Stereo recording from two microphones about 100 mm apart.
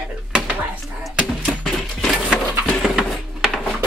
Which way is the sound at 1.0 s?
Centre (ahead or behind).